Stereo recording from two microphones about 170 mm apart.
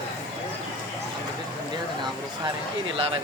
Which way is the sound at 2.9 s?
30° right (ahead or behind).